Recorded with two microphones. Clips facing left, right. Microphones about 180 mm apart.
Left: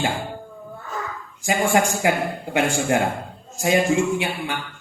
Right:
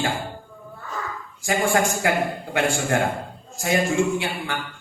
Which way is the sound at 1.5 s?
15° left (ahead or behind).